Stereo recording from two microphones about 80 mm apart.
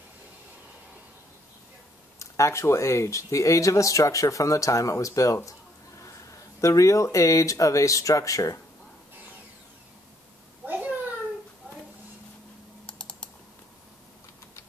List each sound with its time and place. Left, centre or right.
2.1 s speech: left
10.7 s a sound: right
12.8 s typing: centre